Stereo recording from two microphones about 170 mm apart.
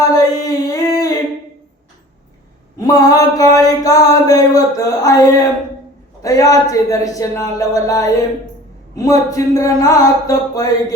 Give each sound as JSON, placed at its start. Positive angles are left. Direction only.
{"t": 0.0, "sound": "singing", "side_deg": 20}
{"t": 2.7, "sound": "a sound", "side_deg": 20}
{"t": 6.2, "sound": "music", "side_deg": 20}